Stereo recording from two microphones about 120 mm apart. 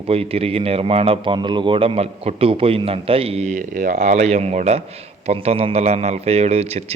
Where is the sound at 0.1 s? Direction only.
55° right (ahead or behind).